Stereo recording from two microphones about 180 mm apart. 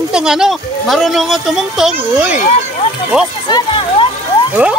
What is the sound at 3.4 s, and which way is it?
Music, 25° left (ahead or behind).